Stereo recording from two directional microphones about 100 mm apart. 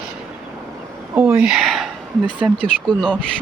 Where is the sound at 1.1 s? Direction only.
15° right (ahead or behind); by 1.9 s centre (ahead or behind).